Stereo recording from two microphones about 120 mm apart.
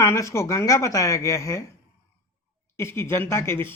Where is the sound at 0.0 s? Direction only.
25° left (ahead or behind).